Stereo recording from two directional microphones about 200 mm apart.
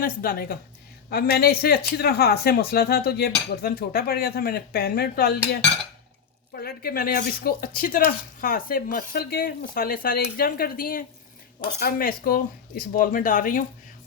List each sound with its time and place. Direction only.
0.0 s speech: 45° left (ahead or behind)